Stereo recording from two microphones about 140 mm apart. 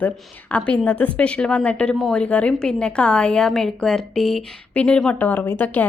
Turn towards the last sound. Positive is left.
turn(degrees=15)  # may be behind; listen again after turning